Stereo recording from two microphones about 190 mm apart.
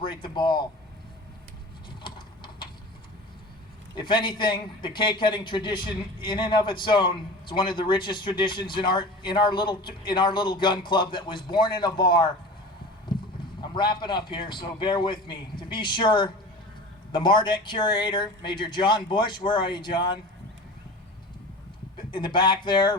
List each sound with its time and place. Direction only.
0.0 s a man's voice: 25° left (ahead or behind)
2.0 s a sound: 25° left (ahead or behind)
3.9 s a man's voice: 25° left (ahead or behind)
13.1 s clip-clop: 25° left (ahead or behind)
13.6 s a man's voice: 25° left (ahead or behind)
22.1 s a man's voice: 25° left (ahead or behind)